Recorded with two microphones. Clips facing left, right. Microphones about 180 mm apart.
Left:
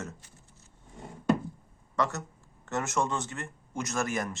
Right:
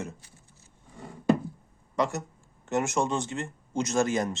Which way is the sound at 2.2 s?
20° right (ahead or behind).